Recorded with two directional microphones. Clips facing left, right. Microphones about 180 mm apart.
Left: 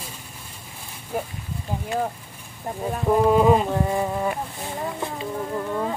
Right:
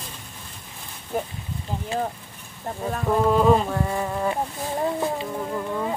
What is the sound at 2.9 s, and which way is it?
Insect, 10° left (ahead or behind).